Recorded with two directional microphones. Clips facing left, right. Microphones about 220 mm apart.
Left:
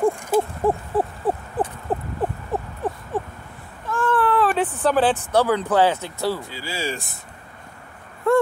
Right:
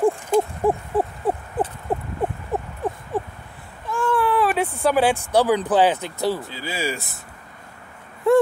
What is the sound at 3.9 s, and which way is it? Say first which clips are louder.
Speech: even; 10° right (ahead or behind).